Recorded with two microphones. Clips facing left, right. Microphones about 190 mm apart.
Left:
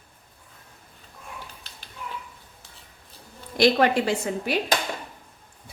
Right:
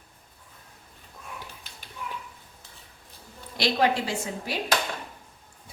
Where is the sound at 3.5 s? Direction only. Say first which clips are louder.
Left 5 dB; 50° left (ahead or behind).